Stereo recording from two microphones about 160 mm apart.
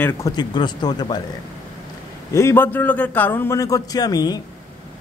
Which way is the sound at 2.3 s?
15° left (ahead or behind).